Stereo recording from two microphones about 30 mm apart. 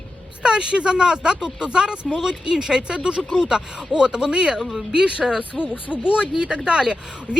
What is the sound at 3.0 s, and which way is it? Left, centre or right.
Speech, right.